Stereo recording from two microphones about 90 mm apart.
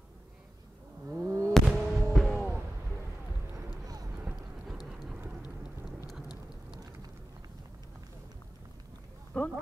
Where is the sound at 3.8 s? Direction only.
45° right (ahead or behind).